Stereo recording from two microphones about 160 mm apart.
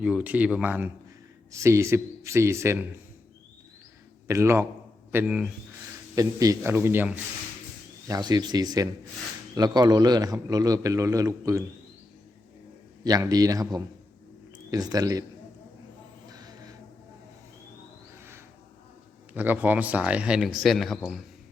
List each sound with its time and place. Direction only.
0.0 s speech: 10° right (ahead or behind)
4.3 s speech: 15° right (ahead or behind)
6.1 s a man's voice: 20° right (ahead or behind)
8.0 s a man's voice: 25° right (ahead or behind)
13.1 s a man's voice: 25° right (ahead or behind)
16.2 s a sound: 25° right (ahead or behind)
18.1 s a sound: 15° right (ahead or behind)
19.3 s speech: 10° right (ahead or behind)